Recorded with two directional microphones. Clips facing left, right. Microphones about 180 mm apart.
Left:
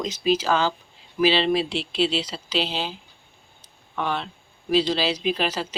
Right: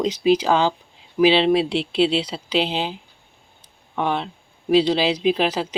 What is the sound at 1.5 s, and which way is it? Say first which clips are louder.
Speech: right 5 dB; 65° right (ahead or behind).